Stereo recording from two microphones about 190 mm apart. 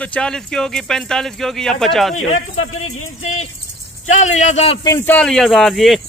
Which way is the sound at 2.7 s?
90° left.